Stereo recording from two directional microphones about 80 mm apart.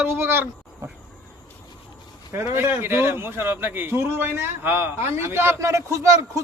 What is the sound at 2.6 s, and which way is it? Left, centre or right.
A man's voice, right.